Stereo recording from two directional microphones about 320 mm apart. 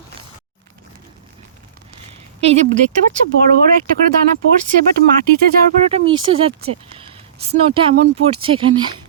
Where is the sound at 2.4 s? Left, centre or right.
Centre.